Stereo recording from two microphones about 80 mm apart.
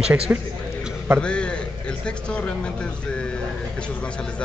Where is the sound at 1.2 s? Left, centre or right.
Centre.